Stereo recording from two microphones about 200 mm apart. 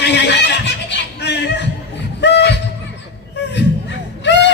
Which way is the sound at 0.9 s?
60° left (ahead or behind).